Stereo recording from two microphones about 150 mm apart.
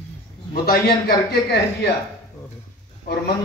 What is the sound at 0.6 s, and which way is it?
A man's voice, 90° left.